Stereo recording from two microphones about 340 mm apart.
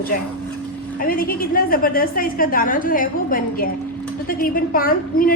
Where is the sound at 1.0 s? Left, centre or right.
Left.